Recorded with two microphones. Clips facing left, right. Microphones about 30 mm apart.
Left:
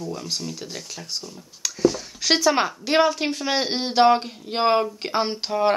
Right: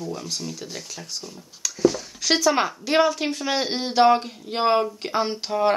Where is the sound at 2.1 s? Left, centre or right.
Left.